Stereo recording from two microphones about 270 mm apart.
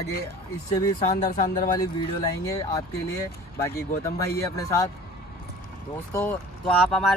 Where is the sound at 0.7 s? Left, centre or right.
Left.